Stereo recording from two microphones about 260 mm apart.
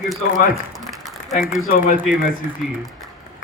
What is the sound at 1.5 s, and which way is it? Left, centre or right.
Speech, left.